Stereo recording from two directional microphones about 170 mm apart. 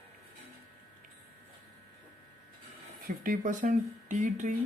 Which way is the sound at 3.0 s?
55° right (ahead or behind).